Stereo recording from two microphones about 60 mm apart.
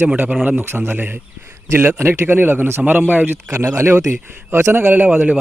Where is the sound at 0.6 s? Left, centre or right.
Right.